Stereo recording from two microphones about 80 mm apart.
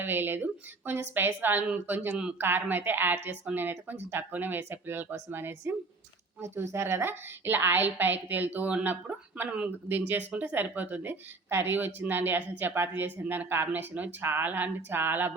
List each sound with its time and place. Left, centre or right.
0.0 s a woman's voice: right